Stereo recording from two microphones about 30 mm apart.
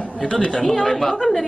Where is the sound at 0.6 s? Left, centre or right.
Centre.